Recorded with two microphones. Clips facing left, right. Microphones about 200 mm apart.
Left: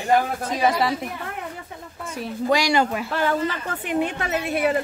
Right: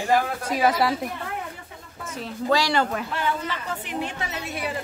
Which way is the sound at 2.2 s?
15° left (ahead or behind).